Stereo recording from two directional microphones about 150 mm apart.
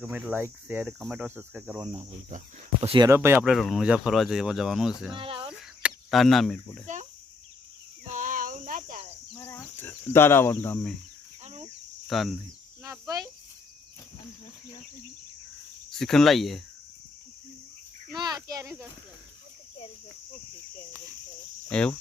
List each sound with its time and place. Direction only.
0.0 s cricket: 10° right (ahead or behind)
3.2 s cricket: 15° right (ahead or behind)
3.5 s speech: centre (ahead or behind)
5.1 s speech: 35° right (ahead or behind)
5.8 s cricket: centre (ahead or behind)
6.8 s speech: 55° right (ahead or behind)
8.0 s a sound: 55° right (ahead or behind)
9.3 s speech: 20° left (ahead or behind)
12.0 s speech: centre (ahead or behind)
12.8 s speech: 25° right (ahead or behind)
16.0 s speech: 5° left (ahead or behind)
18.1 s speech: 30° right (ahead or behind)
21.7 s speech: 5° left (ahead or behind)